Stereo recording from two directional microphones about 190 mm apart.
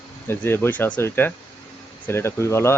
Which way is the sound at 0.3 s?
10° left (ahead or behind).